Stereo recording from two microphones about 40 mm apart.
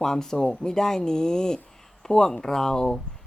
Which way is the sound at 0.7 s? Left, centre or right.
Centre.